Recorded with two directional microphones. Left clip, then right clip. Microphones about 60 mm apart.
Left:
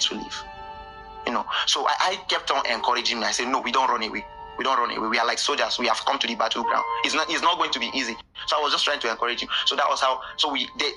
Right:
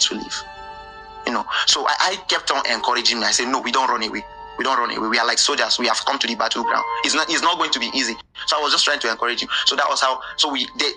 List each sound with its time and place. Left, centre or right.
0.0 s music: right
1.2 s speech: right